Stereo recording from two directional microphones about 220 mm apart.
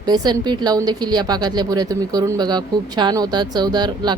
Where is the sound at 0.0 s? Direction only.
20° right (ahead or behind).